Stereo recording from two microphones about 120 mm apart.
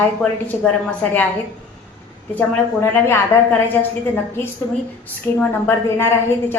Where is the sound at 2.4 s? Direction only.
20° left (ahead or behind).